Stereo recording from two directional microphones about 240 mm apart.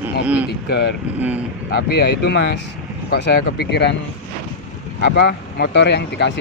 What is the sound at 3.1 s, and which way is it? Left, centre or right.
Speech, left.